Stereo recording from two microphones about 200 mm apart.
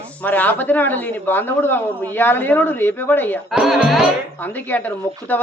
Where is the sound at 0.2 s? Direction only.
10° left (ahead or behind).